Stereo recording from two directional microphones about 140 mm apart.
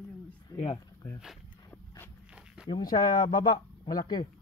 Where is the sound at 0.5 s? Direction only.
25° left (ahead or behind).